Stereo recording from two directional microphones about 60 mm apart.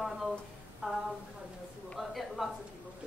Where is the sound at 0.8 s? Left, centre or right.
Centre.